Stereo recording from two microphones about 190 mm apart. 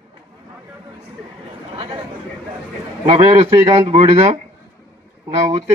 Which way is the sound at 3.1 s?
35° right (ahead or behind).